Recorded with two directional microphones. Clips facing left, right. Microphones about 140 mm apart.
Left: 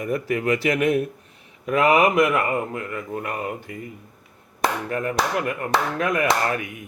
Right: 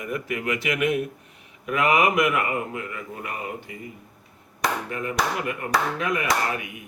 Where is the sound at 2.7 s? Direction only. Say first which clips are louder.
Left 4 dB; 50° left (ahead or behind).